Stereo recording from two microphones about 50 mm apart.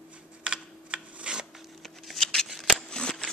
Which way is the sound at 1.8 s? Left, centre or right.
Centre.